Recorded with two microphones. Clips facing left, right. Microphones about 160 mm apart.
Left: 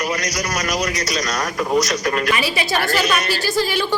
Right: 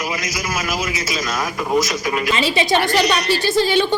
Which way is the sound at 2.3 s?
25° right (ahead or behind).